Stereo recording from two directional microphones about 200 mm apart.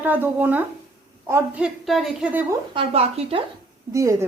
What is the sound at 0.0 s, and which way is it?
A woman's voice, 10° right (ahead or behind).